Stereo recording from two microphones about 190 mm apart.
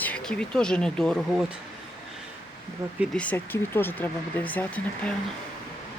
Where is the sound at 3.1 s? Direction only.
10° left (ahead or behind).